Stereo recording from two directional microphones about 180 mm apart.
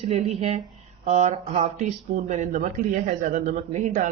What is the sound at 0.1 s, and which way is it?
Speech, 35° right (ahead or behind).